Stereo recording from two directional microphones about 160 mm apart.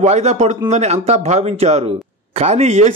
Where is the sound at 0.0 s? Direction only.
45° right (ahead or behind).